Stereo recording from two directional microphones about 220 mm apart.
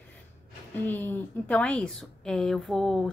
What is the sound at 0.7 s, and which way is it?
A woman's voice, 10° left (ahead or behind).